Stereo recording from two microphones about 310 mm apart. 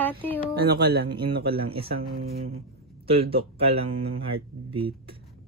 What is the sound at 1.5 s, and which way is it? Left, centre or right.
Speech, centre.